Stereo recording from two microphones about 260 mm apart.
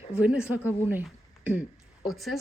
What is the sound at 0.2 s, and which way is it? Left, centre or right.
A woman's voice, centre.